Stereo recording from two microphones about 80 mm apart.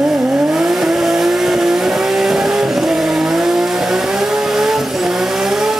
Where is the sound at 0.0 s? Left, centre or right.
Centre.